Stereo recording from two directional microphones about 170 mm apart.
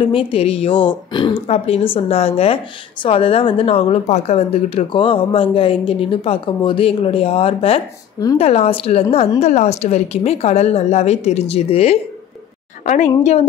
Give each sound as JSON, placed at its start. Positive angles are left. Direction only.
{"t": 0.0, "sound": "a woman's voice", "side_deg": 30}